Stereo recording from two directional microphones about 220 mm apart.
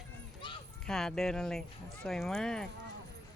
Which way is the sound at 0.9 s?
Centre (ahead or behind).